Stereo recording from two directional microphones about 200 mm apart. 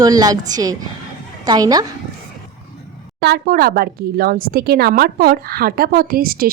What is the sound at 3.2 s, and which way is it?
A woman's voice, 55° right (ahead or behind).